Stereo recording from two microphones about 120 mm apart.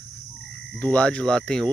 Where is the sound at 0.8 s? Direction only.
10° left (ahead or behind).